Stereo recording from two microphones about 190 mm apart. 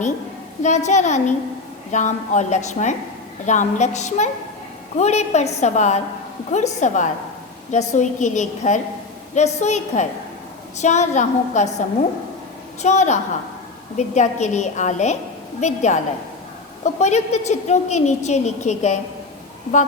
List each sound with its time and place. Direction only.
0.6 s a woman's voice: 40° left (ahead or behind)
12.8 s a woman's voice: 35° left (ahead or behind)